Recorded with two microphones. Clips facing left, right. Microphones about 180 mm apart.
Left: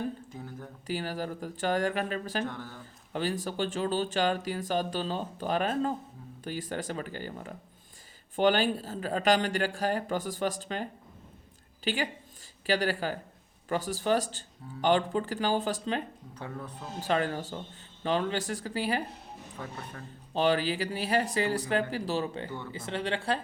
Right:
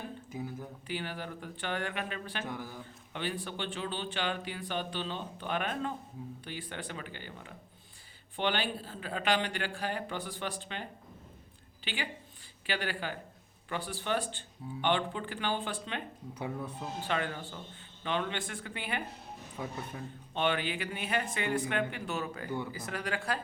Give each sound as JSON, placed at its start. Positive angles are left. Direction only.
{"t": 0.3, "sound": "a sound", "side_deg": -10}
{"t": 0.9, "sound": "speech", "side_deg": 40}
{"t": 2.4, "sound": "speech", "side_deg": -10}
{"t": 3.1, "sound": "speech", "side_deg": 40}
{"t": 11.9, "sound": "a woman's voice", "side_deg": 45}
{"t": 16.3, "sound": "speech", "side_deg": -10}
{"t": 17.0, "sound": "speech", "side_deg": 40}
{"t": 19.6, "sound": "speech", "side_deg": -10}
{"t": 20.3, "sound": "speech", "side_deg": 35}
{"t": 22.4, "sound": "speech", "side_deg": -15}
{"t": 22.7, "sound": "speech", "side_deg": 25}